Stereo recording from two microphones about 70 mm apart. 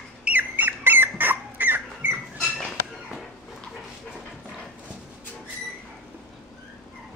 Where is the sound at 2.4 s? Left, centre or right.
Centre.